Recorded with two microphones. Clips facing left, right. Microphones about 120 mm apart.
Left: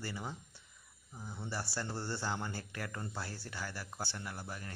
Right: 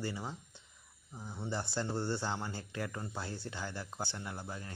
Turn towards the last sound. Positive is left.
turn(degrees=-20)  # may be behind; listen again after turning